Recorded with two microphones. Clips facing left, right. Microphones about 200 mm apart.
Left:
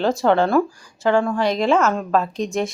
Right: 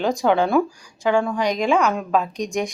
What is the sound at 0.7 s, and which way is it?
Speech, 15° right (ahead or behind).